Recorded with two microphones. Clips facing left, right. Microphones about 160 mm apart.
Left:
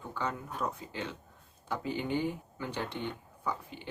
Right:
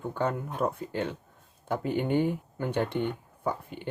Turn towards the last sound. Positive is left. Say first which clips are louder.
# right 5 dB
turn(degrees=-55)  # may be behind; listen again after turning